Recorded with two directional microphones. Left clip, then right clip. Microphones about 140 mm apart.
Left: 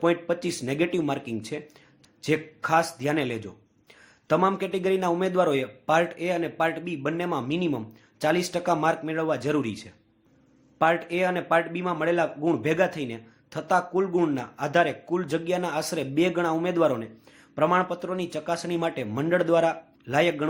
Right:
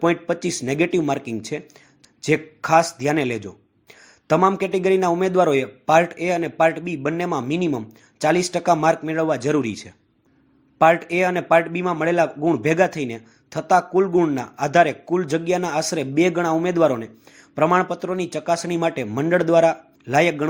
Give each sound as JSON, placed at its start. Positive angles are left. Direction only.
{"t": 0.0, "sound": "a man's voice", "side_deg": -30}